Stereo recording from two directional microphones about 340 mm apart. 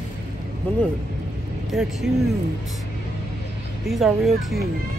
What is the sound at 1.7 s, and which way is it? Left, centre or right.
Speech, centre.